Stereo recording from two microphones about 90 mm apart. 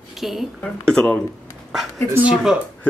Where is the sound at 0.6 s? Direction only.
10° left (ahead or behind).